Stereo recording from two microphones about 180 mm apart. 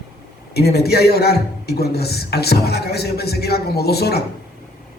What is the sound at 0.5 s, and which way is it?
A man's voice, 60° left (ahead or behind).